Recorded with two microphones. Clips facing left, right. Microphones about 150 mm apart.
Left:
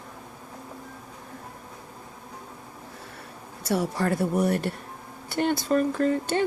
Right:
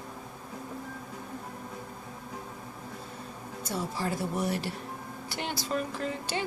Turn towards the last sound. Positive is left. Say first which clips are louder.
# left 9 dB
turn(degrees=50)  # may be behind; listen again after turning